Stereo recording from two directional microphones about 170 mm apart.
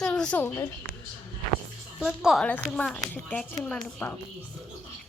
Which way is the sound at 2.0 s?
Centre (ahead or behind).